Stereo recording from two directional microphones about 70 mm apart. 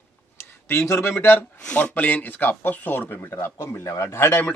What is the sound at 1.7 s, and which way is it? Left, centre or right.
Speech, left.